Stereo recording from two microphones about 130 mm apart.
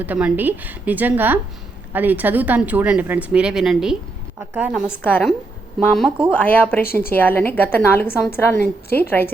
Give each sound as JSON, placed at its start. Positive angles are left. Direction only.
{"t": 0.0, "sound": "a woman's voice", "side_deg": -10}
{"t": 6.3, "sound": "a woman's voice", "side_deg": 15}